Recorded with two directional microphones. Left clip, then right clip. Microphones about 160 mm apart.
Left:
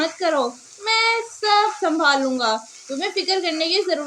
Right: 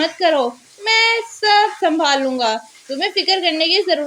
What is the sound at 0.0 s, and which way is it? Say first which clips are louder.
Speech: right 5 dB; 25° right (ahead or behind).